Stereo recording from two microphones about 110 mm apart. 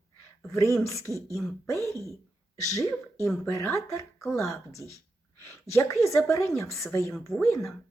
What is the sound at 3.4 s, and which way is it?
Speech, 25° left (ahead or behind).